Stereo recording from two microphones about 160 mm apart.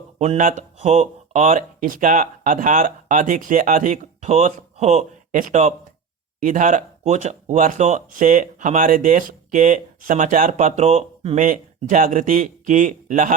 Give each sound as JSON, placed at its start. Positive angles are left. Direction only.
{"t": 0.3, "sound": "speech", "side_deg": -55}
{"t": 11.3, "sound": "speech", "side_deg": -55}